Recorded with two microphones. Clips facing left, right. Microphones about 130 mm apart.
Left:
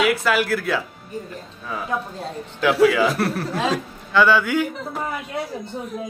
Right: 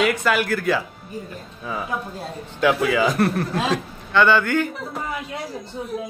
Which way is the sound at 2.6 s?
Centre (ahead or behind).